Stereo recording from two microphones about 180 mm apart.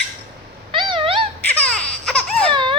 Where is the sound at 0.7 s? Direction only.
25° right (ahead or behind).